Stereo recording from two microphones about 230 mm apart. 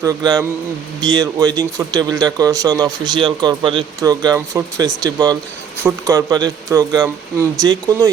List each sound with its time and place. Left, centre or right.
0.0 s a man's voice: centre